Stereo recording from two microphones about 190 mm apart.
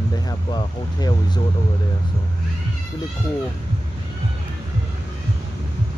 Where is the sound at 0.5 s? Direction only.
25° left (ahead or behind).